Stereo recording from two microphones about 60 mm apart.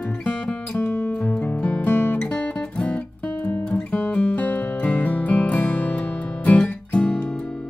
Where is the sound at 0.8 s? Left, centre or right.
Left.